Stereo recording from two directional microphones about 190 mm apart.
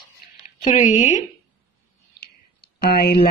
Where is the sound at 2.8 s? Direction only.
55° left (ahead or behind).